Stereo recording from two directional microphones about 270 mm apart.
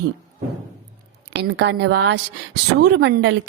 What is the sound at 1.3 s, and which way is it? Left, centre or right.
A woman's voice, right.